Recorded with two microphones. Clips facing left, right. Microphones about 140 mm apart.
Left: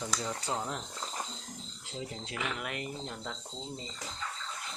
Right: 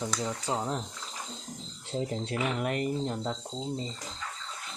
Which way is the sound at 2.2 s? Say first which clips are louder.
Right 7 dB; 35° right (ahead or behind).